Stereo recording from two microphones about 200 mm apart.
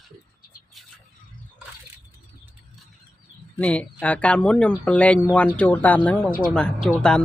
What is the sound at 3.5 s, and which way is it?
Speech, 5° left (ahead or behind).